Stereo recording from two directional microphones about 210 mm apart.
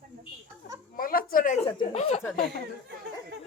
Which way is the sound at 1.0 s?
45° left (ahead or behind).